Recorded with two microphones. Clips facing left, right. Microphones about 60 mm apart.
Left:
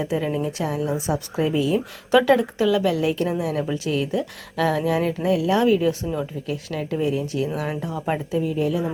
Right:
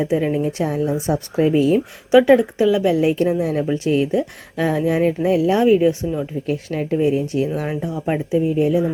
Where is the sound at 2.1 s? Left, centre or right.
Centre.